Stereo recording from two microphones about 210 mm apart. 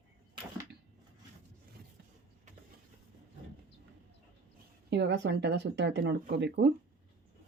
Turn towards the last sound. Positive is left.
turn(degrees=-55)  # may be behind; listen again after turning